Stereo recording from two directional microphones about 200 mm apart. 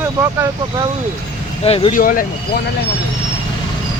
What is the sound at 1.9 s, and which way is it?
Speech, 45° left (ahead or behind).